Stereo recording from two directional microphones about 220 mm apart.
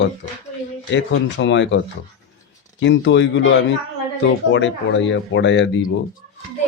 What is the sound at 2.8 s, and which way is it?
Speech, 55° left (ahead or behind).